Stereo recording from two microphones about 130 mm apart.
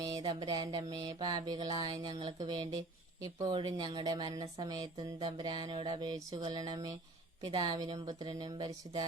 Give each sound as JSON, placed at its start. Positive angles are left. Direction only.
{"t": 0.0, "sound": "speech", "side_deg": -35}